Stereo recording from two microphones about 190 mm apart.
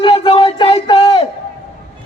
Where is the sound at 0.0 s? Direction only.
30° left (ahead or behind).